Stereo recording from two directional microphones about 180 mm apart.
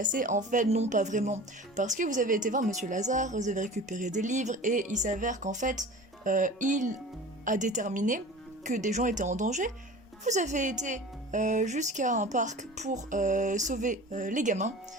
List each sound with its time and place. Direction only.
0.0 s speech: 45° right (ahead or behind)